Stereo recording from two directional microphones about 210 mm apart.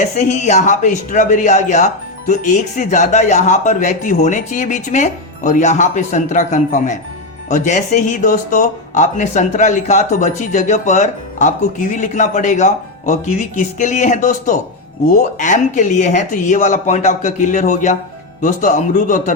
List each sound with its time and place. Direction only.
0.0 s speech: 35° left (ahead or behind)